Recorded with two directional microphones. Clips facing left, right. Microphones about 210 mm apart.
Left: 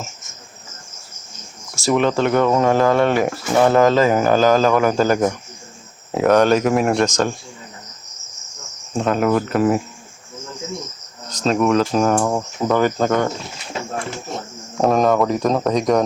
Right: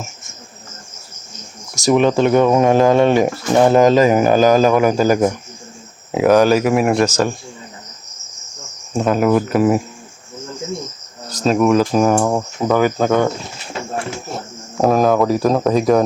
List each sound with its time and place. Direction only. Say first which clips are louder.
1.8 s speech: right 4 dB; 15° right (ahead or behind)
8.9 s speech: right 3 dB; 5° right (ahead or behind)
11.3 s speech: right 3 dB; 5° right (ahead or behind)
14.3 s speech: right 1 dB; 5° right (ahead or behind)